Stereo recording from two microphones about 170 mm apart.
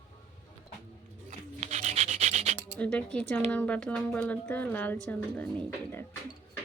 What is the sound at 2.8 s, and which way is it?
Speech, 5° left (ahead or behind).